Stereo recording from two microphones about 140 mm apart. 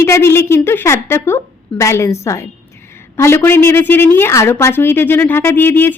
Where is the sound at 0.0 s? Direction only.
20° left (ahead or behind).